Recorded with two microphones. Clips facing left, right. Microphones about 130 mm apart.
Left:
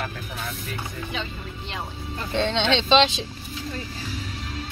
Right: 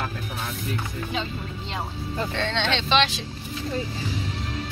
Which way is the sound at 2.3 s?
20° left (ahead or behind).